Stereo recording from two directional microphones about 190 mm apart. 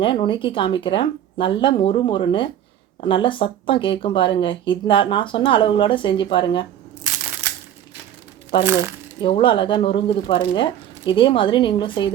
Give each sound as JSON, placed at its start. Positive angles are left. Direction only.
{"t": 0.0, "sound": "speech", "side_deg": 25}
{"t": 9.2, "sound": "speech", "side_deg": 25}